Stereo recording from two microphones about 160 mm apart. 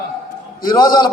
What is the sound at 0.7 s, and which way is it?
Speech, 30° left (ahead or behind).